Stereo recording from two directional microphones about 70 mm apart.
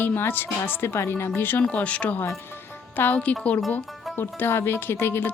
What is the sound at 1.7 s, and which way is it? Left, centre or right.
Music, centre.